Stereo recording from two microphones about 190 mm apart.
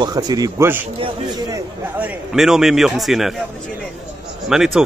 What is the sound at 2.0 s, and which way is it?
Speech, 5° right (ahead or behind).